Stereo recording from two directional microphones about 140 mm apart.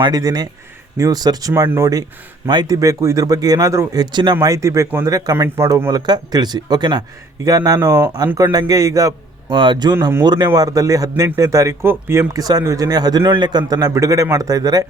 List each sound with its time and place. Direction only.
0.0 s speech: 25° right (ahead or behind)
9.5 s a man's voice: 35° right (ahead or behind)